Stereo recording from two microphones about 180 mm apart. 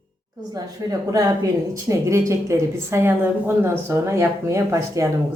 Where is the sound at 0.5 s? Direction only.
20° right (ahead or behind).